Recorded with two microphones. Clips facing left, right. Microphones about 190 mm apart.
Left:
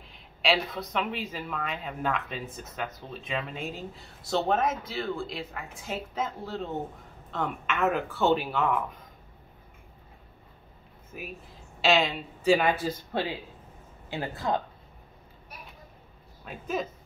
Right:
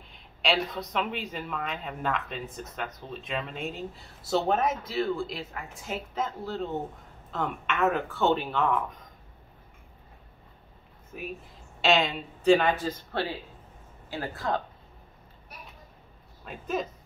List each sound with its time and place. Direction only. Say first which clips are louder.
0.1 s speech: left 1 dB; centre (ahead or behind)
11.1 s speech: right 3 dB; 5° left (ahead or behind)
14.4 s speech: left 1 dB; 15° left (ahead or behind)
16.4 s speech: even; centre (ahead or behind)